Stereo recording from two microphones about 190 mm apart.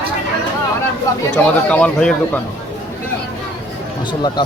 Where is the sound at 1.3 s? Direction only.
10° left (ahead or behind).